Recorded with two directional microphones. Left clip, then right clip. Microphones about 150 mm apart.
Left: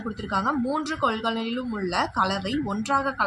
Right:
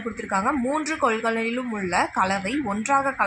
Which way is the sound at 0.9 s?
45° right (ahead or behind).